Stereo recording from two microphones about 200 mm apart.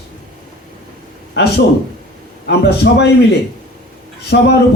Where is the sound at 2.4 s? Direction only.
60° left (ahead or behind).